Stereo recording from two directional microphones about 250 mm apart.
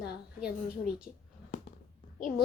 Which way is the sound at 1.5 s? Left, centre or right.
Left.